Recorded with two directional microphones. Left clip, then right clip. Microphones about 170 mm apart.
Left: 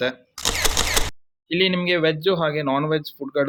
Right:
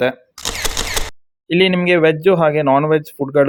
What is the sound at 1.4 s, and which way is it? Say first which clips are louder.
Speech: right 6 dB; 35° right (ahead or behind).